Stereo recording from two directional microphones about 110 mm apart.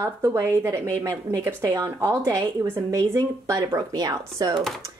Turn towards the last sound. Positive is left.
turn(degrees=-35)  # may be behind; listen again after turning